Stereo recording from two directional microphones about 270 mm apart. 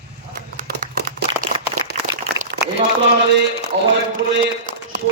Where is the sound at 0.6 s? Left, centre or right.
Right.